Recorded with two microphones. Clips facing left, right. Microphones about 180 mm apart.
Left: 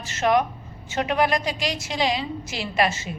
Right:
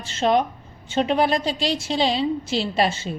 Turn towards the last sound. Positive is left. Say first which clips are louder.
# right 1 dB
turn(degrees=-30)  # may be behind; listen again after turning